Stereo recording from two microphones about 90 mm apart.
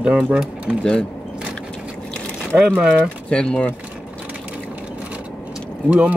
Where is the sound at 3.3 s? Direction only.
10° left (ahead or behind).